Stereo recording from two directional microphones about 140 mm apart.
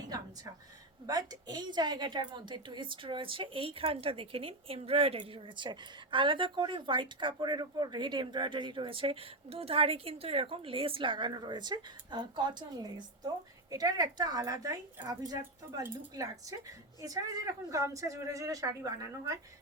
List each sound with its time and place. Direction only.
1.0 s a woman's voice: 30° right (ahead or behind)